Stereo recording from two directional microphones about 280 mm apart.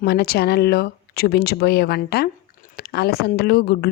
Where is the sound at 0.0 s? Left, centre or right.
Left.